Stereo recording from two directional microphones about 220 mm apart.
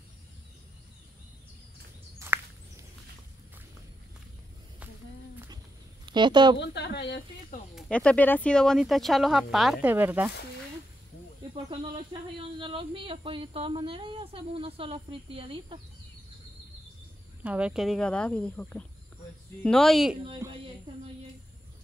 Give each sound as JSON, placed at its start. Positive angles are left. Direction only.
{"t": 2.1, "sound": "a sound", "side_deg": -10}
{"t": 6.0, "sound": "speech", "side_deg": -20}
{"t": 6.6, "sound": "a woman's voice", "side_deg": 50}
{"t": 7.7, "sound": "speech", "side_deg": 5}
{"t": 12.1, "sound": "speech", "side_deg": -20}
{"t": 17.4, "sound": "speech", "side_deg": -5}
{"t": 20.4, "sound": "speech", "side_deg": -15}